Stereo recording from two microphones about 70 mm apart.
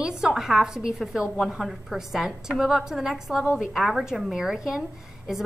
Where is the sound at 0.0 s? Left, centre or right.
Centre.